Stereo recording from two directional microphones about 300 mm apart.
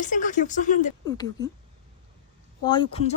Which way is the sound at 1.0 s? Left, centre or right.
Centre.